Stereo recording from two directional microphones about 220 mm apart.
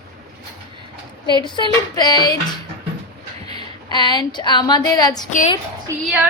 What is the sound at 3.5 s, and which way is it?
A woman's voice, 20° left (ahead or behind).